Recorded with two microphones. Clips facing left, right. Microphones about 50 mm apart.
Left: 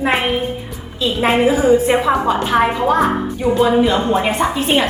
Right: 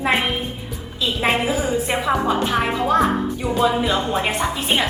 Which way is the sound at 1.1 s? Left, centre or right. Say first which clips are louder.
Left 5 dB; centre.